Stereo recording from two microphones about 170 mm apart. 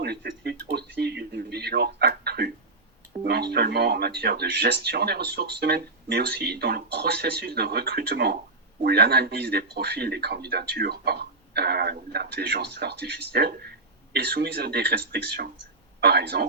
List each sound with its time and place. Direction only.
0.0 s a man's voice: 75° right (ahead or behind)